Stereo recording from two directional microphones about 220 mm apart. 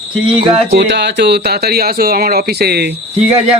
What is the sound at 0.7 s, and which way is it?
Speech, 50° right (ahead or behind).